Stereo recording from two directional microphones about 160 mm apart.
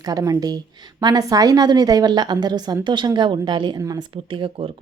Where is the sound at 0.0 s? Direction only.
25° right (ahead or behind).